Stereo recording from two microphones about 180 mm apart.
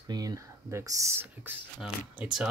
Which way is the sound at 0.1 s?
20° right (ahead or behind).